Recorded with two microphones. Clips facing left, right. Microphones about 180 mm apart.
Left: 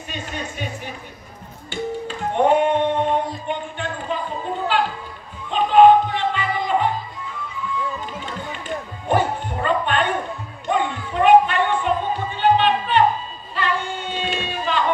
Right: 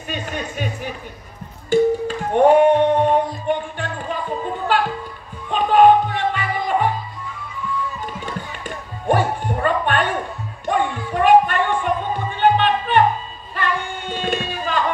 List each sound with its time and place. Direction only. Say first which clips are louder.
0.1 s a sound: right 4 dB; 50° right (ahead or behind)
1.7 s music: right 10 dB; 45° right (ahead or behind)
5.5 s music: left 1 dB; 50° right (ahead or behind)
8.6 s music: right 4 dB; 50° right (ahead or behind)
10.7 s child singing: right 1 dB; 50° right (ahead or behind)
12.4 s a sound: right 1 dB; 50° right (ahead or behind)